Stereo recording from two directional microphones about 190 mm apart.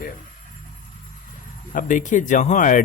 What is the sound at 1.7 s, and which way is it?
Speech, 45° left (ahead or behind).